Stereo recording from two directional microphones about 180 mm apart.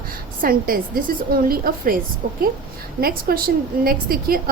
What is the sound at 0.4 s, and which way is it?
A woman's voice, 55° right (ahead or behind).